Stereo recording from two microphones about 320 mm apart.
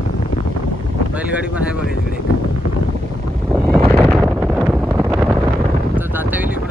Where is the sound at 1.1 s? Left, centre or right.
Centre.